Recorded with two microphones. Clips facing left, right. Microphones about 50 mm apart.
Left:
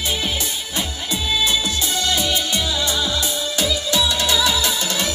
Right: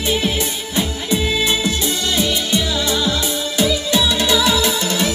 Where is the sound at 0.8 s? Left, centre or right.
Right.